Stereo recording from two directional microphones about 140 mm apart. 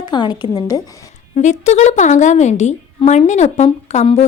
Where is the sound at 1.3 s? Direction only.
60° left (ahead or behind).